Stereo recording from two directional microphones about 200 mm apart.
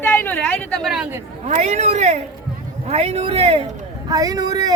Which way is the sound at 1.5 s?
35° right (ahead or behind).